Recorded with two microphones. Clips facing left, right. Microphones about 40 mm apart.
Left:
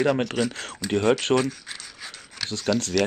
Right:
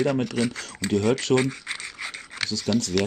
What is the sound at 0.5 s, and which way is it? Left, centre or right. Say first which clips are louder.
Speech: right 1 dB; left.